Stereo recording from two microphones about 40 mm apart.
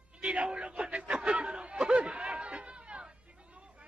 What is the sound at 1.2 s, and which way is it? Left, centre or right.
Chatter, right.